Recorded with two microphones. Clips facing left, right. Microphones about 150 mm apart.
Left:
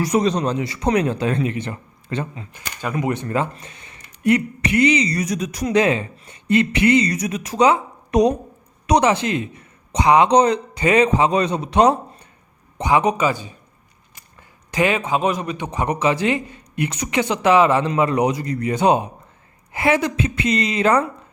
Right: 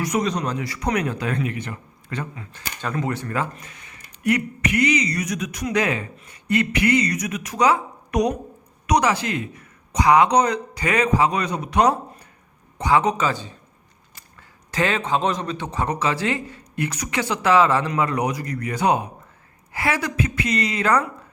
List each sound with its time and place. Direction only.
0.0 s a man's voice: 30° left (ahead or behind); by 13.6 s 10° left (ahead or behind)
14.7 s a man's voice: 15° left (ahead or behind)